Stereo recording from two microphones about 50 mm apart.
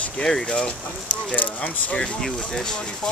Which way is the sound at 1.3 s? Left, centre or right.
Left.